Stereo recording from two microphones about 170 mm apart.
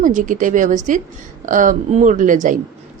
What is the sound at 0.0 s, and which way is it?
Speech, 50° right (ahead or behind).